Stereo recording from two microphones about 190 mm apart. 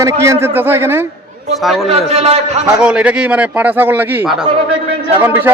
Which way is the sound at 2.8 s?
5° right (ahead or behind).